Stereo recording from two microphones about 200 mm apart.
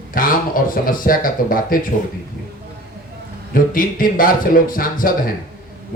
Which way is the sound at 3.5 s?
45° left (ahead or behind).